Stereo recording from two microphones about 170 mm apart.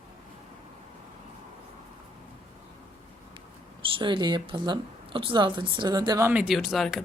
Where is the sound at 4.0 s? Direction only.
30° right (ahead or behind).